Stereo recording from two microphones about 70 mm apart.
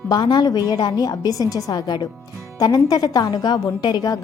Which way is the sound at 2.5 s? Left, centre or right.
Left.